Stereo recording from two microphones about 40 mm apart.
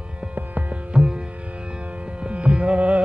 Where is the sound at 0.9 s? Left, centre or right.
Right.